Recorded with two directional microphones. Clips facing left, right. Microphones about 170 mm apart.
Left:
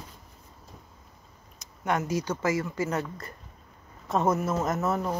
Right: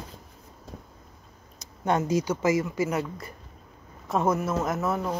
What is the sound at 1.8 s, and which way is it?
Speech, 25° right (ahead or behind).